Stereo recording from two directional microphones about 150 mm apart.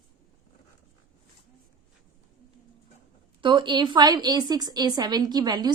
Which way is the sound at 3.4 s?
35° right (ahead or behind).